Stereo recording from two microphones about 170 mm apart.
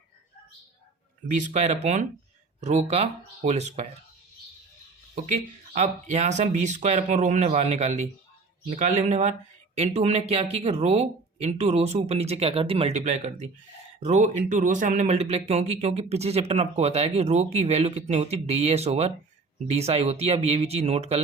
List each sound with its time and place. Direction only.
1.4 s speech: 45° right (ahead or behind)
5.7 s speech: 45° right (ahead or behind)